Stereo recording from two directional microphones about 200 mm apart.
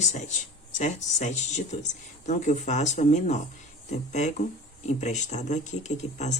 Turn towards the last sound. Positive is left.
turn(degrees=35)  # may be behind; listen again after turning